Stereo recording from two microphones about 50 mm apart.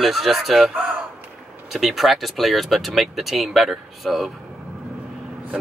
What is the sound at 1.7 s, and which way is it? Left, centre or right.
Speech, centre.